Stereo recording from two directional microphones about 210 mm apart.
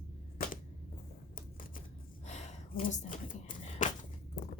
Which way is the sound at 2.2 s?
35° left (ahead or behind).